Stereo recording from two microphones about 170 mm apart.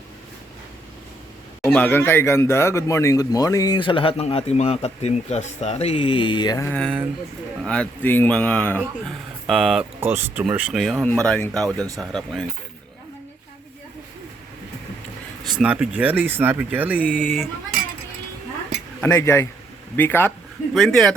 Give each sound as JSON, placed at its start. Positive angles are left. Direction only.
{"t": 1.6, "sound": "speech", "side_deg": 10}
{"t": 6.7, "sound": "speech", "side_deg": 5}
{"t": 10.0, "sound": "speech", "side_deg": -15}
{"t": 11.0, "sound": "speech", "side_deg": 5}
{"t": 15.5, "sound": "speech", "side_deg": -5}
{"t": 17.0, "sound": "speech", "side_deg": 10}
{"t": 19.0, "sound": "speech", "side_deg": 15}
{"t": 20.7, "sound": "speech", "side_deg": 0}